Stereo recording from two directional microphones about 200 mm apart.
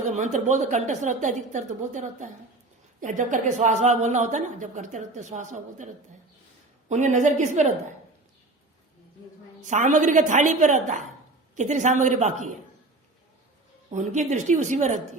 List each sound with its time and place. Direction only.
0.0 s a woman's voice: 35° right (ahead or behind)
9.6 s a woman's voice: 40° right (ahead or behind)
13.9 s a woman's voice: 35° right (ahead or behind)